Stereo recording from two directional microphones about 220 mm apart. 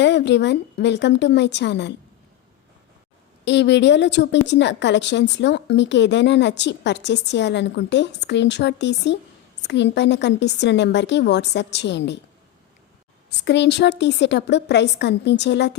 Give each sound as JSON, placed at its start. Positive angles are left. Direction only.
{"t": 0.0, "sound": "a woman's voice", "side_deg": 50}
{"t": 3.4, "sound": "a woman's voice", "side_deg": 55}
{"t": 13.4, "sound": "a woman's voice", "side_deg": 50}